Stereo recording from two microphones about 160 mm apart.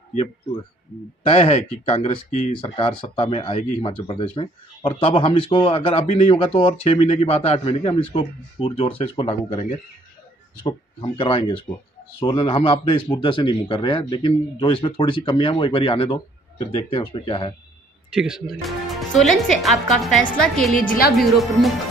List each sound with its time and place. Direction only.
1.2 s speech: 40° left (ahead or behind)
18.1 s speech: 5° right (ahead or behind)